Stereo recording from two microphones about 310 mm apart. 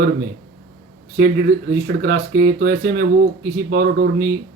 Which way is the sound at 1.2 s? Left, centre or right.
Right.